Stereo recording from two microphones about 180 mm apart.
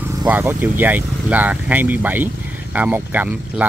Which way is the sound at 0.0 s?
15° right (ahead or behind).